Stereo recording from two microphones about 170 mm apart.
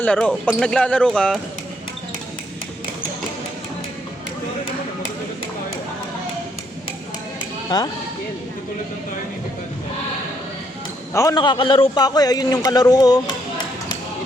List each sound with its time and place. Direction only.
0.0 s speech: 5° left (ahead or behind)
7.7 s a man's voice: 25° left (ahead or behind)
11.1 s a man's voice: 20° left (ahead or behind)